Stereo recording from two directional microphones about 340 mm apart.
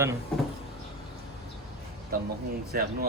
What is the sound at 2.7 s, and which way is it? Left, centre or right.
Speech, right.